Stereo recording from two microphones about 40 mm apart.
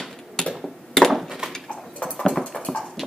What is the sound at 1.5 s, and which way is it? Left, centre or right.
Clip-clop, left.